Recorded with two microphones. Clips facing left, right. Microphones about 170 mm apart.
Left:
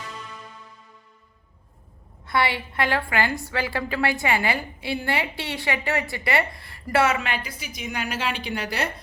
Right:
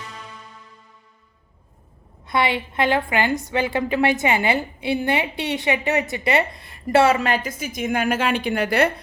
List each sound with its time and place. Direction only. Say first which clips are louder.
2.2 s a woman's voice: right 3 dB; 20° right (ahead or behind); by 8.9 s 55° right (ahead or behind)